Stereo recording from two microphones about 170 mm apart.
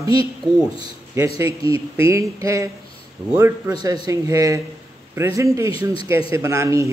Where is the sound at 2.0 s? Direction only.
20° right (ahead or behind).